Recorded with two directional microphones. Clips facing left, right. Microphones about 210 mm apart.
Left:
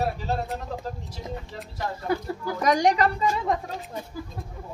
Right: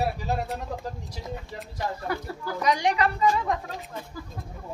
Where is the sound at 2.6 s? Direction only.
45° left (ahead or behind).